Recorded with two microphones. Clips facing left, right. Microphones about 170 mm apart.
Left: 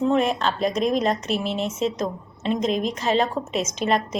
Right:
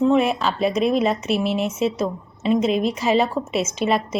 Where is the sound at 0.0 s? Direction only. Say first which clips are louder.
Right 3 dB; 5° right (ahead or behind).